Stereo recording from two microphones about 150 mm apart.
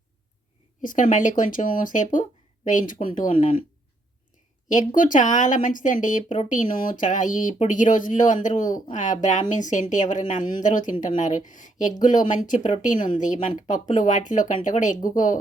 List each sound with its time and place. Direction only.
0.8 s a woman's voice: 60° left (ahead or behind)
4.9 s a woman's voice: 60° left (ahead or behind)